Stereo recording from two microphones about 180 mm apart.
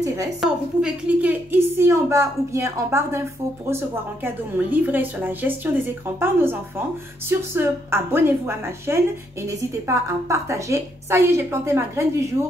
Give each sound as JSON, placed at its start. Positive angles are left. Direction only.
{"t": 0.4, "sound": "a woman's voice", "side_deg": -5}
{"t": 4.2, "sound": "a woman's voice", "side_deg": -10}